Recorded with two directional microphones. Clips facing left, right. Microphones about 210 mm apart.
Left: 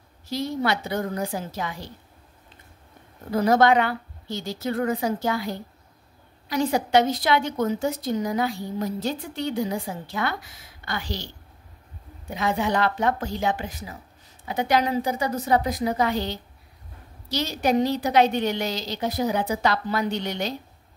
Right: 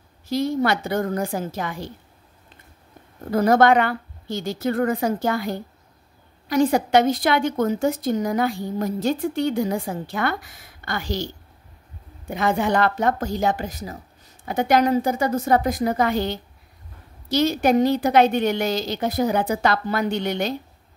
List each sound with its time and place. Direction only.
0.3 s a woman's voice: 50° right (ahead or behind)
3.3 s a woman's voice: 50° right (ahead or behind)
12.3 s a woman's voice: 50° right (ahead or behind)